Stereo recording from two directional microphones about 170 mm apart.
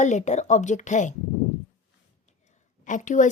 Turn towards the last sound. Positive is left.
turn(degrees=50)  # may be behind; listen again after turning